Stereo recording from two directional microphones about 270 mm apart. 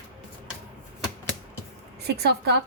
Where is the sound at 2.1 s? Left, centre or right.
Right.